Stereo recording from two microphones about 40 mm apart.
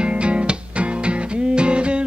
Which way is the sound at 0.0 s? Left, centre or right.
Right.